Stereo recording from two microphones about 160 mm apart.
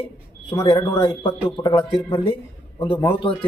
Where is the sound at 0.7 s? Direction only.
30° left (ahead or behind).